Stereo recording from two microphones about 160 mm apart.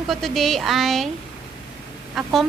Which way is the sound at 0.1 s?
Centre (ahead or behind).